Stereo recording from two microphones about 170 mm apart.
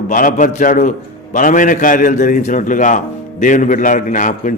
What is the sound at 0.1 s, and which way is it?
A man's voice, 50° left (ahead or behind).